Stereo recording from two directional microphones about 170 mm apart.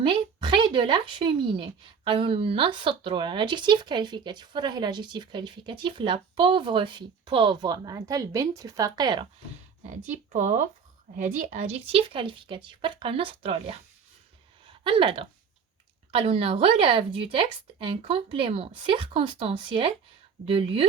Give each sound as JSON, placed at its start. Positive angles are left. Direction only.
{"t": 0.0, "sound": "a woman's voice", "side_deg": -30}
{"t": 9.8, "sound": "speech", "side_deg": -45}